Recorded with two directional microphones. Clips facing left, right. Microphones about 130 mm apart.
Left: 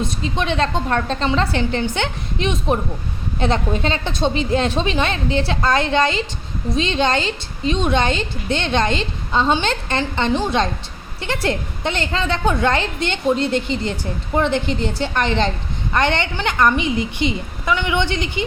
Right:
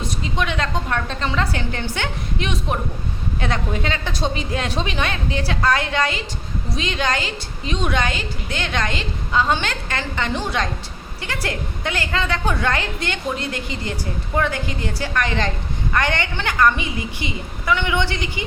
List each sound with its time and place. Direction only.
0.0 s a woman's voice: 25° left (ahead or behind)